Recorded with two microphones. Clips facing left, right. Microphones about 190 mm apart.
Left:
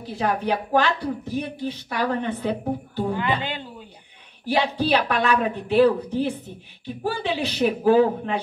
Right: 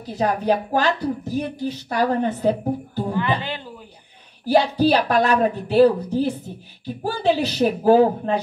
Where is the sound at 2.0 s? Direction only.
40° right (ahead or behind).